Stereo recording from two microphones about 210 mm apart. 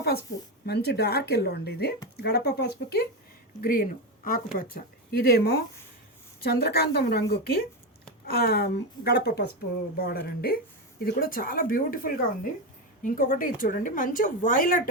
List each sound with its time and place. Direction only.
0.6 s a woman's voice: 50° left (ahead or behind)